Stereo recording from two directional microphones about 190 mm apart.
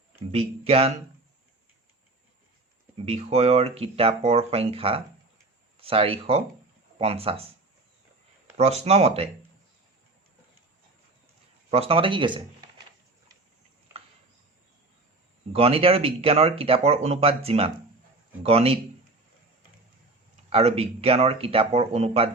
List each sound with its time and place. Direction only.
0.3 s speech: 30° right (ahead or behind)
3.1 s speech: 35° right (ahead or behind)
8.5 s speech: 35° right (ahead or behind)
11.7 s speech: 30° right (ahead or behind)
13.9 s a sound: 10° right (ahead or behind)
15.5 s speech: 30° right (ahead or behind)
20.5 s speech: 30° right (ahead or behind)